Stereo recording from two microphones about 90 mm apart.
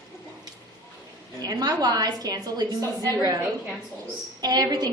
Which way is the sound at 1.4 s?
45° right (ahead or behind).